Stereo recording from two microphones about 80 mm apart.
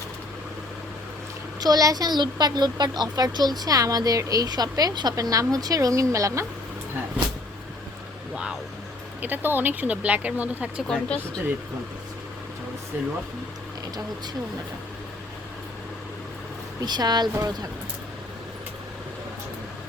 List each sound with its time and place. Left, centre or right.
1.6 s a child's voice: right
9.2 s speech: right
10.8 s speech: centre
16.8 s a child's voice: right